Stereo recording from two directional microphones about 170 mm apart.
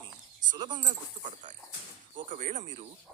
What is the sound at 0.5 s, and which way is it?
Speech, 25° right (ahead or behind).